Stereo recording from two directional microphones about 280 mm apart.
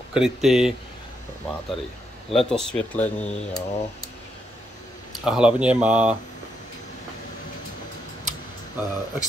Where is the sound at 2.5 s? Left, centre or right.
Centre.